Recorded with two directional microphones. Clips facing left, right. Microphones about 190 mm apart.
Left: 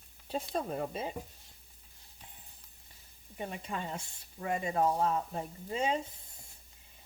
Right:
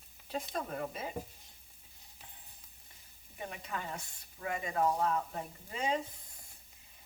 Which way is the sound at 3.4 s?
25° left (ahead or behind).